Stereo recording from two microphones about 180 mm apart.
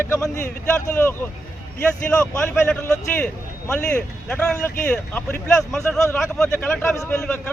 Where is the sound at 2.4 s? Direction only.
10° left (ahead or behind).